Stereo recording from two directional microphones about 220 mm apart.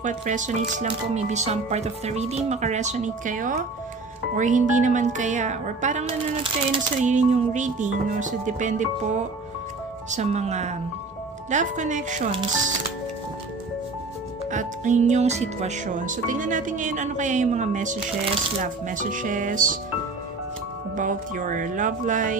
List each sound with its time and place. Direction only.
0.0 s speech: 35° right (ahead or behind)
10.1 s speech: 30° right (ahead or behind)
14.5 s speech: 35° right (ahead or behind)
20.9 s speech: 35° right (ahead or behind)